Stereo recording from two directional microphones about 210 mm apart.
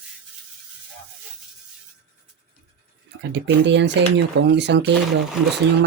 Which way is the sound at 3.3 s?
55° right (ahead or behind).